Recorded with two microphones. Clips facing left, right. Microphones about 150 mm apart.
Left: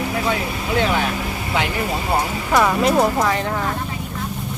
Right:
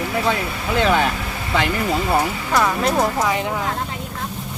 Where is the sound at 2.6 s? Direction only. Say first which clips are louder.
Left 2 dB; centre (ahead or behind).